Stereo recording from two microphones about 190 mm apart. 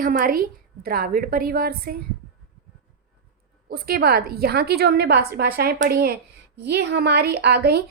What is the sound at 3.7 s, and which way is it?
A woman's voice, 55° right (ahead or behind).